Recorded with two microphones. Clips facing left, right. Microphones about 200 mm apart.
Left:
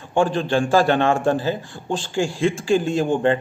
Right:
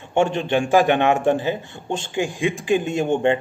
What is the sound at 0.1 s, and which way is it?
A man's voice, 25° right (ahead or behind).